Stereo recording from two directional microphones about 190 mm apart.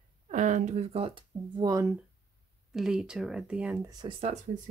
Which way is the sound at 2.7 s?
5° right (ahead or behind).